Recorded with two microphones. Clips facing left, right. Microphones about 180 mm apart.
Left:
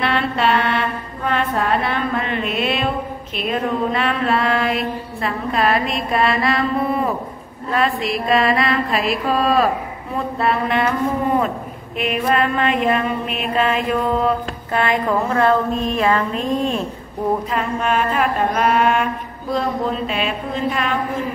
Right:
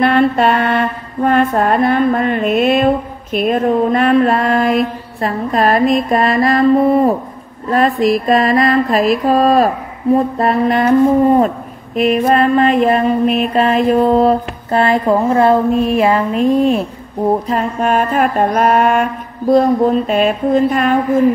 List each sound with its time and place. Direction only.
0.0 s mantra: 45° right (ahead or behind)
10.1 s speech: 40° right (ahead or behind)
16.0 s mantra: 25° right (ahead or behind)
17.5 s mantra: 40° right (ahead or behind)